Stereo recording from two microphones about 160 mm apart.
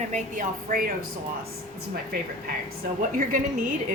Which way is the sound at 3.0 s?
55° right (ahead or behind).